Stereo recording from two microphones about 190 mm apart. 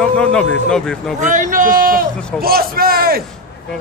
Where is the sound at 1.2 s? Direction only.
40° right (ahead or behind).